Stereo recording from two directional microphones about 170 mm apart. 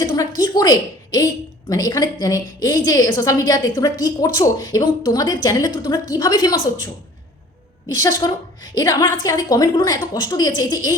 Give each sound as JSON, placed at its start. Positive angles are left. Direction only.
{"t": 0.0, "sound": "a woman's voice", "side_deg": 20}
{"t": 8.2, "sound": "a woman's voice", "side_deg": 25}